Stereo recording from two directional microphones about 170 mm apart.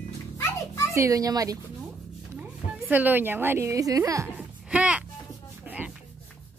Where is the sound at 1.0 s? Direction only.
20° right (ahead or behind).